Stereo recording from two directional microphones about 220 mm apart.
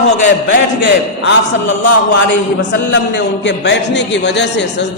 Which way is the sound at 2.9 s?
55° left (ahead or behind).